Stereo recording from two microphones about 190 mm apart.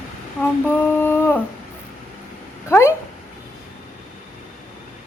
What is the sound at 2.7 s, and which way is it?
Speech, 15° left (ahead or behind).